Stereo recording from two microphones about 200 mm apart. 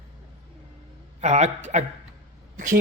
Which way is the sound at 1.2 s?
35° right (ahead or behind).